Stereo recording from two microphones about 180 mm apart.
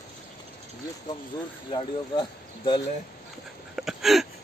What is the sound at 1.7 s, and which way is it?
Speech, 25° left (ahead or behind).